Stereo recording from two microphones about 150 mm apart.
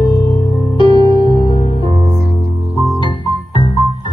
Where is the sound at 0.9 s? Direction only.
30° right (ahead or behind).